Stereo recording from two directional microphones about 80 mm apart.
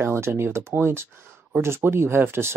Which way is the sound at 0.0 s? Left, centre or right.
Right.